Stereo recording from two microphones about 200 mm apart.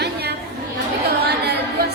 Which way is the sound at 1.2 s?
55° right (ahead or behind).